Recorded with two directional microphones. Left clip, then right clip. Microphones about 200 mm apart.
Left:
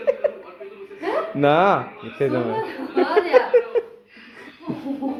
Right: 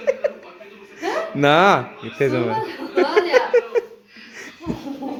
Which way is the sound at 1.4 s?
15° right (ahead or behind).